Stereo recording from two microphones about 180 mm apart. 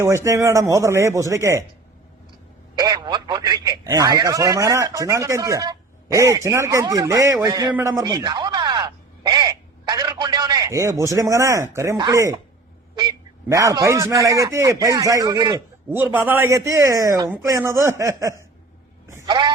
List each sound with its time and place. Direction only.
0.0 s speech: 15° right (ahead or behind)
2.7 s speech: 20° right (ahead or behind)
7.8 s a sound: 15° right (ahead or behind)
13.0 s a man's voice: 20° right (ahead or behind)
16.0 s speech: 10° right (ahead or behind)
19.0 s a sound: 20° right (ahead or behind)